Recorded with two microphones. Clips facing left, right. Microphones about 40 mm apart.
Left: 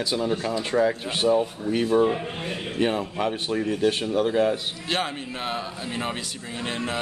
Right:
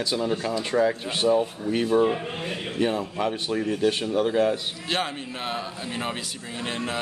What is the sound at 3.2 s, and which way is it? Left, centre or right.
A man's voice, centre.